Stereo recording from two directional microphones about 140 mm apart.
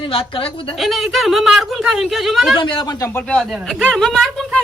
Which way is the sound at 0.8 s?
Centre (ahead or behind).